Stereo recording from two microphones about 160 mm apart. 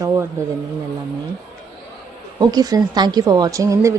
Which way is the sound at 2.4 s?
25° right (ahead or behind).